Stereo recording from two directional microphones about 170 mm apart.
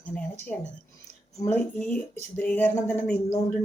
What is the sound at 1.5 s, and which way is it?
Speech, 10° left (ahead or behind).